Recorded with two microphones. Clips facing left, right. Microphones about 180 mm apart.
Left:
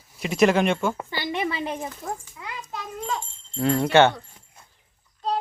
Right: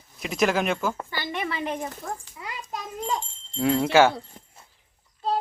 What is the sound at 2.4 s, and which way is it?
Children playing, 15° right (ahead or behind).